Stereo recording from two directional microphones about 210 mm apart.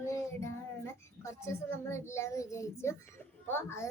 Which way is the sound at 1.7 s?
10° left (ahead or behind).